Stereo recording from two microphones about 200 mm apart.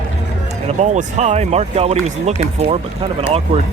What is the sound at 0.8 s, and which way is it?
Speech, 35° right (ahead or behind).